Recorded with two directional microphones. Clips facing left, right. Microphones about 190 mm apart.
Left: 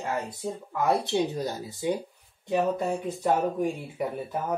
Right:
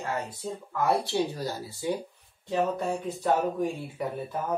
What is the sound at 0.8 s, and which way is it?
Speech, 20° left (ahead or behind).